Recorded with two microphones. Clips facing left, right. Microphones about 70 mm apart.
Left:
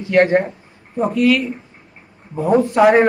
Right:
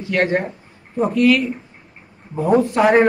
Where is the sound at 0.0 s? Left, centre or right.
Left.